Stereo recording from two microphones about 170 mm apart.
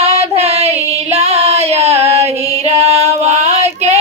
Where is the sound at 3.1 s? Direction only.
40° right (ahead or behind).